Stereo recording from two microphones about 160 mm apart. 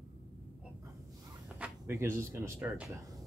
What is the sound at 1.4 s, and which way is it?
Speech, 10° right (ahead or behind).